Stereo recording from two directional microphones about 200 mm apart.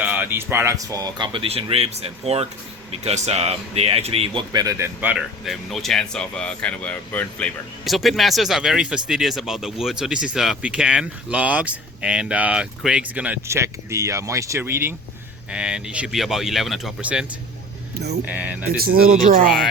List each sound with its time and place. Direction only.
0.0 s speech: 10° right (ahead or behind)
18.3 s speech: 10° right (ahead or behind)
18.8 s speech: 45° right (ahead or behind)